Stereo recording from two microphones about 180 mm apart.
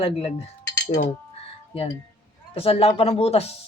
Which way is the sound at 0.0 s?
35° left (ahead or behind).